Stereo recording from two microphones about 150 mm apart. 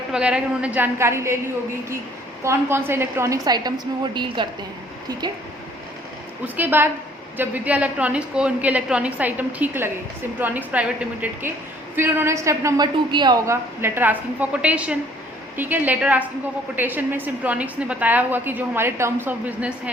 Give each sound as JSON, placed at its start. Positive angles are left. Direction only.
{"t": 0.1, "sound": "a woman's voice", "side_deg": -5}
{"t": 2.4, "sound": "a woman's voice", "side_deg": -15}
{"t": 6.4, "sound": "a woman's voice", "side_deg": -10}